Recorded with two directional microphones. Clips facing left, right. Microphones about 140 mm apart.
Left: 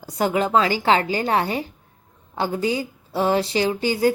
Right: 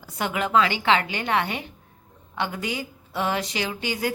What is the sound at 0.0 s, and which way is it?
A woman's voice, 35° left (ahead or behind).